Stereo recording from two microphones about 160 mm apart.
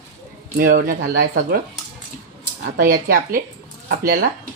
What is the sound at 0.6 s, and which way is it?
Speech, 65° right (ahead or behind).